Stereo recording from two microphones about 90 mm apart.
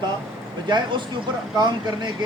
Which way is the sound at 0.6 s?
55° right (ahead or behind).